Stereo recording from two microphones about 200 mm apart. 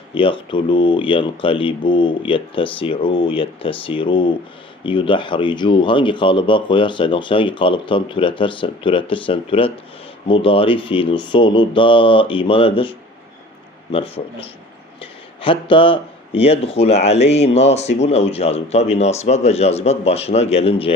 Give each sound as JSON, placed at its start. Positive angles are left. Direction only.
{"t": 0.1, "sound": "speech", "side_deg": 25}